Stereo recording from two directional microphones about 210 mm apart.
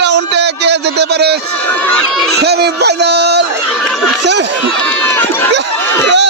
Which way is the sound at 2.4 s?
50° right (ahead or behind).